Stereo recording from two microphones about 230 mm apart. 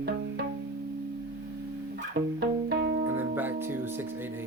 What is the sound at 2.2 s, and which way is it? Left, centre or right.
Music, right.